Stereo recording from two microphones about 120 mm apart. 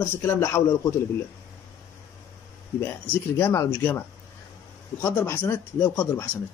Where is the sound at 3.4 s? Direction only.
20° left (ahead or behind).